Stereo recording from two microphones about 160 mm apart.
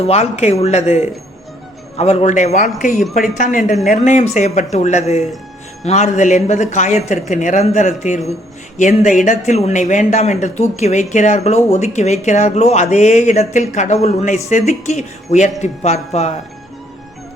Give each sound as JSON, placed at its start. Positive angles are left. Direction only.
{"t": 0.0, "sound": "speech", "side_deg": 40}